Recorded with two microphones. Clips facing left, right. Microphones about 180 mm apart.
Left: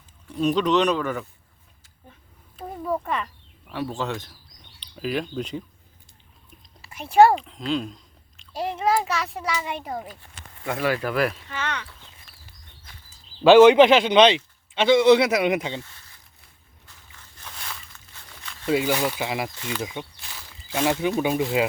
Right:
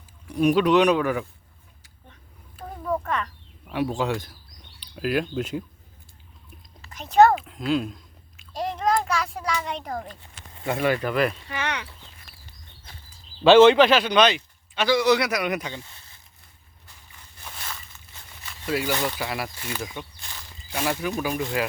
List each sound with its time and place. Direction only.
0.3 s speech: 10° right (ahead or behind)
2.6 s a sound: 10° left (ahead or behind)
3.7 s speech: 15° right (ahead or behind)
6.8 s speech: 10° left (ahead or behind)
7.3 s speech: 5° right (ahead or behind)
8.5 s a child's voice: 5° left (ahead or behind)
11.4 s speech: 15° right (ahead or behind)
13.4 s a man's voice: 15° left (ahead or behind)
16.8 s a sound: 10° right (ahead or behind)
18.7 s speech: 15° left (ahead or behind)
19.5 s speech: 5° right (ahead or behind)
19.8 s a man's voice: 20° left (ahead or behind)
21.1 s a man's voice: 20° left (ahead or behind)